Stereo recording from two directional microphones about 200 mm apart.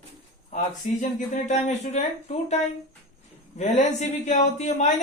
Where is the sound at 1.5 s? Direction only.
35° left (ahead or behind).